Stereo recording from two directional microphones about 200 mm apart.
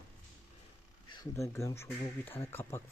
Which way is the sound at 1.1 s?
20° left (ahead or behind).